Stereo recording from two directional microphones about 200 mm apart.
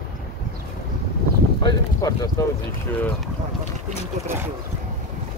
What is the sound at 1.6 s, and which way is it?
Speech, 20° left (ahead or behind).